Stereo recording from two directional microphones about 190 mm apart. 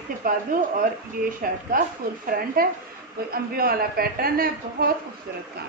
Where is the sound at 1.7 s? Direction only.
45° right (ahead or behind).